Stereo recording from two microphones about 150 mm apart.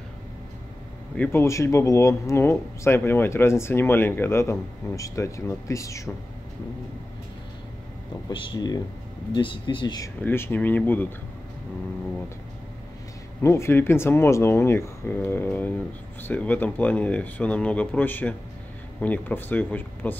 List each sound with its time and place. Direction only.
1.1 s speech: 10° left (ahead or behind)
1.4 s speech: 20° left (ahead or behind)
8.3 s speech: 35° left (ahead or behind)
10.2 s speech: 15° left (ahead or behind)
13.4 s speech: 15° left (ahead or behind)